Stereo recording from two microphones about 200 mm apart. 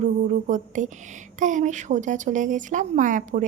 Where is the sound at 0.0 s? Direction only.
40° right (ahead or behind).